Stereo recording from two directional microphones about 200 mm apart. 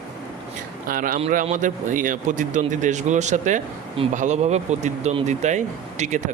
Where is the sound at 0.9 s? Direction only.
45° right (ahead or behind).